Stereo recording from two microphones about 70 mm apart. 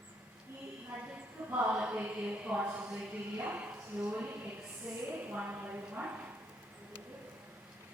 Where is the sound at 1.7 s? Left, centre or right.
Centre.